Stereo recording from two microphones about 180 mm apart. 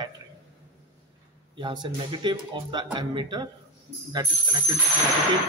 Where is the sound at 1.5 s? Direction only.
25° right (ahead or behind).